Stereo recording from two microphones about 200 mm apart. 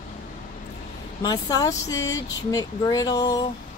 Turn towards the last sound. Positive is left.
turn(degrees=20)  # may be behind; listen again after turning